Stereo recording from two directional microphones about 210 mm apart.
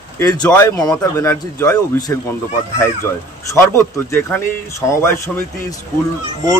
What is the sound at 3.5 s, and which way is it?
Speech, 15° left (ahead or behind).